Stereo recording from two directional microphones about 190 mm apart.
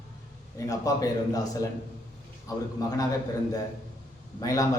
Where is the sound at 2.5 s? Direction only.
20° left (ahead or behind).